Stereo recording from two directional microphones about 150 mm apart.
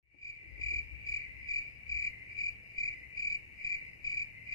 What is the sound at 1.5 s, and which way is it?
Cricket, 20° left (ahead or behind).